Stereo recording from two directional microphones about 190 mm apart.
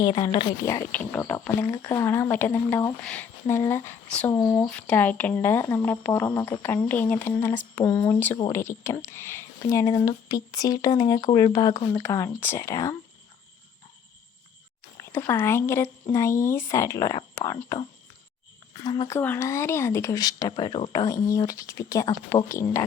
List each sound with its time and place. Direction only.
0.0 s speech: 20° left (ahead or behind)
14.9 s speech: 15° left (ahead or behind)